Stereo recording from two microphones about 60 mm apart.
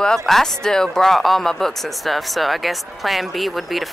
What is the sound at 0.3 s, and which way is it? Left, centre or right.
Speech, centre.